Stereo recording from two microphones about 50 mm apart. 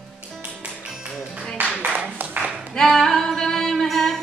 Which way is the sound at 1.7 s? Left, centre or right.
Right.